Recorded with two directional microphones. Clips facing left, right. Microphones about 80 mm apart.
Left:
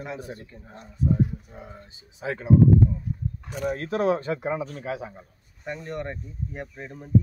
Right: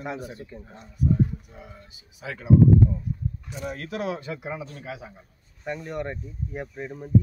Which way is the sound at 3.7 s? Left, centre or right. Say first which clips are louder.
Left 7 dB; left.